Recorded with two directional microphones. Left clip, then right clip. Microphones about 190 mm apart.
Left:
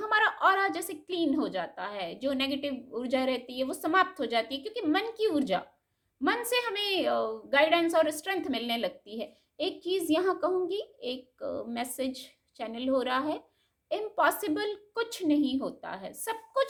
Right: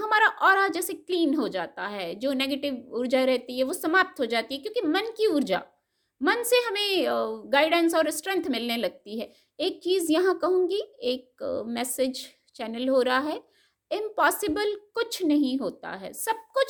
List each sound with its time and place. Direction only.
0.0 s a woman's voice: 40° right (ahead or behind)